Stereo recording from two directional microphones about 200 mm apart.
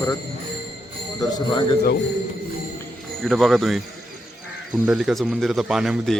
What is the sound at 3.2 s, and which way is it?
Speech, centre (ahead or behind).